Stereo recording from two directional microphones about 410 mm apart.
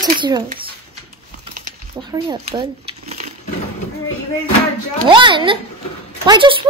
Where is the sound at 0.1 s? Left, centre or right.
Centre.